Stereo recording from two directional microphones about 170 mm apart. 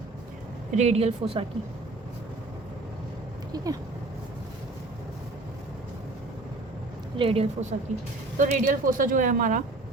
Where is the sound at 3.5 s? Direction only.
20° right (ahead or behind).